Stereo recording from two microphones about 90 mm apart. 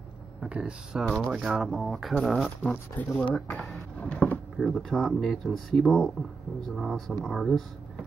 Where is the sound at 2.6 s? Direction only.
15° left (ahead or behind).